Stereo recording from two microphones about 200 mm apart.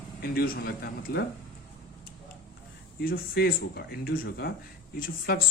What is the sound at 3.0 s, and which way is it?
Speech, 45° left (ahead or behind).